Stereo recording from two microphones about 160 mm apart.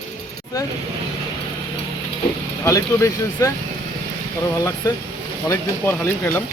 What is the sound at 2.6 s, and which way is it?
Speech, 20° left (ahead or behind).